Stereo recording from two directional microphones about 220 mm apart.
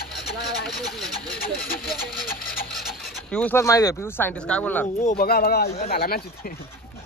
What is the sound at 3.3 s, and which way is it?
Speech, 5° left (ahead or behind).